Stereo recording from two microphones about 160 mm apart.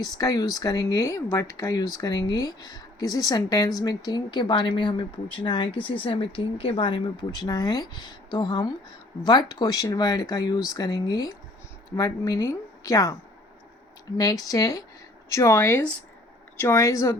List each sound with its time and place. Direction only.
0.2 s speech: 20° left (ahead or behind)
14.2 s speech: 25° left (ahead or behind)